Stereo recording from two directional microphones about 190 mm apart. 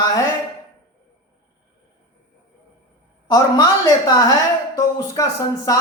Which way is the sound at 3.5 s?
20° left (ahead or behind).